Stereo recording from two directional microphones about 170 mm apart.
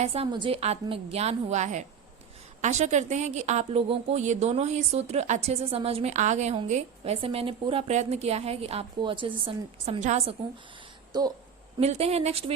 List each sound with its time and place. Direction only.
0.0 s a woman's voice: 35° right (ahead or behind)
11.1 s a woman's voice: 25° right (ahead or behind)
11.8 s a woman's voice: 35° right (ahead or behind)